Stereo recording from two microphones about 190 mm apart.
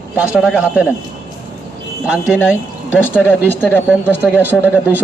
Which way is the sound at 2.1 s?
5° right (ahead or behind).